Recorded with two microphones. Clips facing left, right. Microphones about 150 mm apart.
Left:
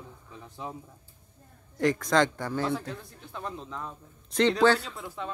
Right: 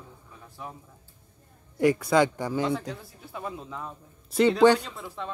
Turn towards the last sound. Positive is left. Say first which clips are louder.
# even
turn(degrees=0)  # may be behind; listen again after turning